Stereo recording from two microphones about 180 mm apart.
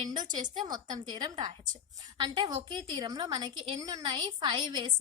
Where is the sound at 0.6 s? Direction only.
20° right (ahead or behind).